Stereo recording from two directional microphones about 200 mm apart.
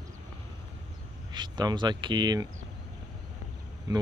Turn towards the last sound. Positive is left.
turn(degrees=-20)  # may be behind; listen again after turning